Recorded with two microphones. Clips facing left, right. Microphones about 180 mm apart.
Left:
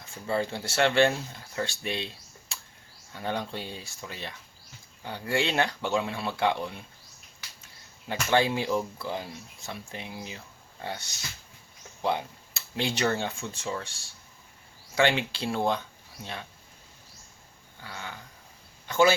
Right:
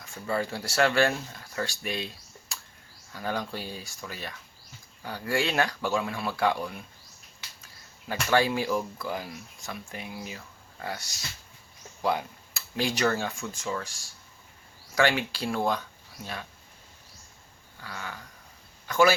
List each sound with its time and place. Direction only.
0.0 s speech: 25° left (ahead or behind)
2.5 s bird: 25° left (ahead or behind)
3.1 s speech: 25° left (ahead or behind)
8.0 s speech: 25° left (ahead or behind)
17.8 s speech: 25° left (ahead or behind)